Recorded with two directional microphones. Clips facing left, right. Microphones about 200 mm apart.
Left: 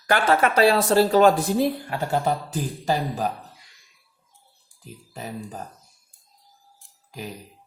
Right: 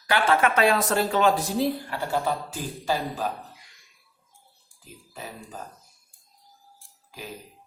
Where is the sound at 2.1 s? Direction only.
45° left (ahead or behind).